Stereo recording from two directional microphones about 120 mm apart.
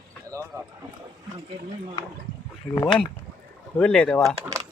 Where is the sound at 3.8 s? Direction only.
5° left (ahead or behind).